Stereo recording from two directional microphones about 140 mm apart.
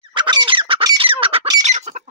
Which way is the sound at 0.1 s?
30° right (ahead or behind).